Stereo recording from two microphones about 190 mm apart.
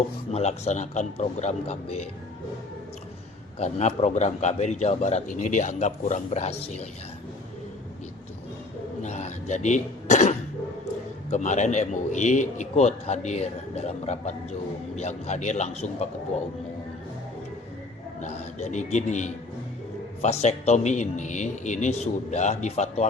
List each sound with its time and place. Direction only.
0.3 s a man's voice: 35° left (ahead or behind)
3.6 s a man's voice: 35° left (ahead or behind)
9.0 s a man's voice: 35° left (ahead or behind)
18.2 s a man's voice: 40° left (ahead or behind)